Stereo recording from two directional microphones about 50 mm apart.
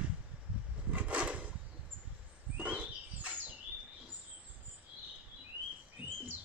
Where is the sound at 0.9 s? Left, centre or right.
Right.